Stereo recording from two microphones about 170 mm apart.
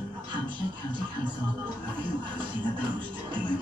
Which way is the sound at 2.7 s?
30° right (ahead or behind).